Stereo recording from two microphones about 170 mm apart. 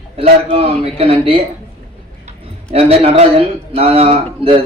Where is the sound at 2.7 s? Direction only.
35° right (ahead or behind).